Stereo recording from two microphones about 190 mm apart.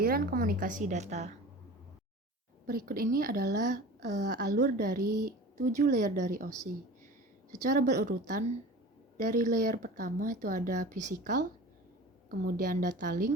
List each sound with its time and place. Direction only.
0.0 s speech: 50° right (ahead or behind)
2.6 s speech: 50° right (ahead or behind)
7.6 s speech: 45° right (ahead or behind)
12.5 s speech: 45° right (ahead or behind)